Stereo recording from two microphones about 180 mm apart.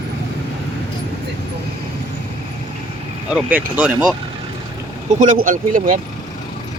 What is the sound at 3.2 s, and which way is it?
Speech, 5° right (ahead or behind).